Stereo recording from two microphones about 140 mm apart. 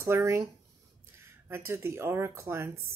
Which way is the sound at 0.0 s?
20° right (ahead or behind).